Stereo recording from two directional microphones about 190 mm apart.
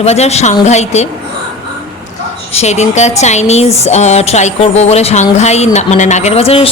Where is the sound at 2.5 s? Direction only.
35° left (ahead or behind).